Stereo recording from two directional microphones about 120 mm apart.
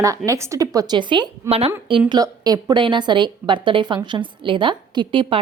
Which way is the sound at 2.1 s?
35° right (ahead or behind).